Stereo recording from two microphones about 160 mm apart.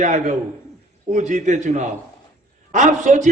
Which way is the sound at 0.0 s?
50° right (ahead or behind).